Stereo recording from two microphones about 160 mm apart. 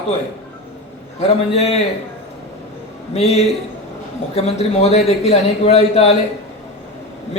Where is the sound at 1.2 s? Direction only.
40° left (ahead or behind).